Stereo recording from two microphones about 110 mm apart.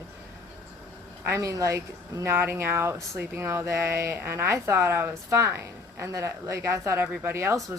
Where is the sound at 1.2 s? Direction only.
30° right (ahead or behind).